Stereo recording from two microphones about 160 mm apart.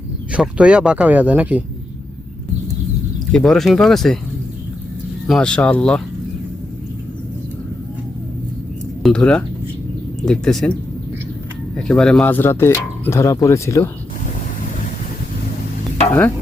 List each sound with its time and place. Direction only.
0.3 s speech: 10° right (ahead or behind)
3.3 s speech: centre (ahead or behind)
5.3 s speech: 5° left (ahead or behind)
9.0 s speech: 5° left (ahead or behind)
11.9 s speech: 5° left (ahead or behind)